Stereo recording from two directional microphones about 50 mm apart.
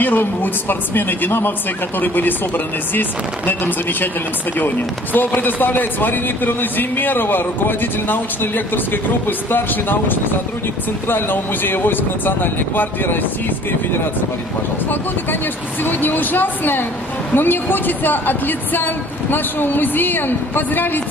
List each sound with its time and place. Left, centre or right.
0.0 s speech: left
15.8 s speech: left